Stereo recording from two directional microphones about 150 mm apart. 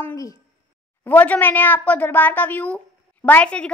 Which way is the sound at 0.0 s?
20° left (ahead or behind).